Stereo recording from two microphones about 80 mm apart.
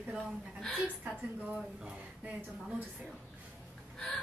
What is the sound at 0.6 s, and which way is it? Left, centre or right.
Speech, centre.